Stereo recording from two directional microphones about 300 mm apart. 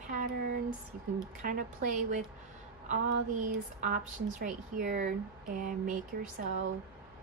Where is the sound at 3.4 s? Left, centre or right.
Right.